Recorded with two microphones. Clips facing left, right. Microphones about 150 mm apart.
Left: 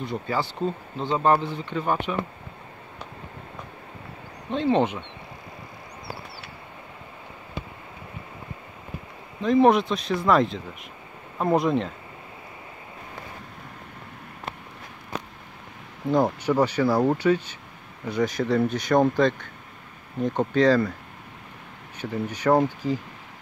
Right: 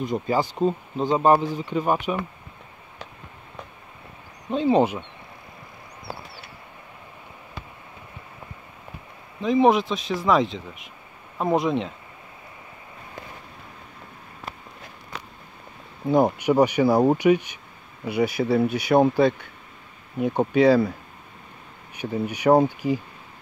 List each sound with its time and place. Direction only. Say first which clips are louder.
0.0 s speech: right 4 dB; 15° right (ahead or behind)
4.5 s speech: right 2 dB; 5° right (ahead or behind)
9.4 s speech: even; centre (ahead or behind)
16.1 s speech: right 3 dB; 15° right (ahead or behind)
21.9 s speech: right 2 dB; 15° right (ahead or behind)